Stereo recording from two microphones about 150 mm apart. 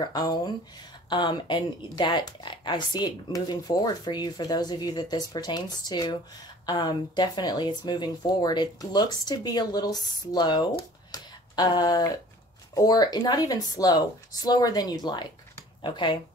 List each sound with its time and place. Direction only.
0.0 s speech: 25° left (ahead or behind)